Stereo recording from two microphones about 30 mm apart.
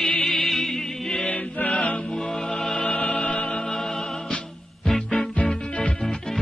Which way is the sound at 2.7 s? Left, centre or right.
Left.